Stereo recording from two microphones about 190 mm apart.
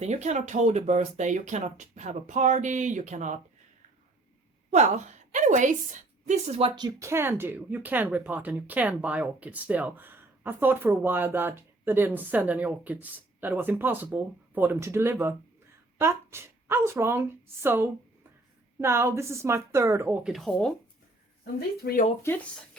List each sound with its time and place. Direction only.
0.0 s speech: 35° right (ahead or behind)
4.7 s a woman's voice: 35° right (ahead or behind); by 20.7 s 5° left (ahead or behind)
21.8 s speech: 55° left (ahead or behind)